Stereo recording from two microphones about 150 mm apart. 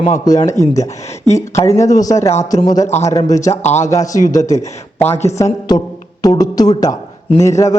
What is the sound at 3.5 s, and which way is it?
Speech, 50° left (ahead or behind).